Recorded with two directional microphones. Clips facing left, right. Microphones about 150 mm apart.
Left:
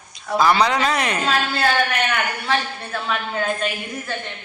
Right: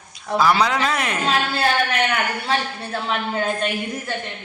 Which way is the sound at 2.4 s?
25° right (ahead or behind).